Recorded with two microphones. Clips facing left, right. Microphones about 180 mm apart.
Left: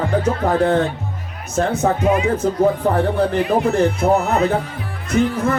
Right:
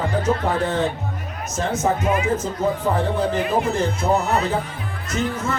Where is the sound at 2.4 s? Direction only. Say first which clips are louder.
Left 5 dB; 60° left (ahead or behind).